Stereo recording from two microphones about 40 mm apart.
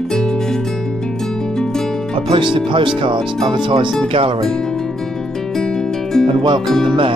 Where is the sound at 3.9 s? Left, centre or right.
Centre.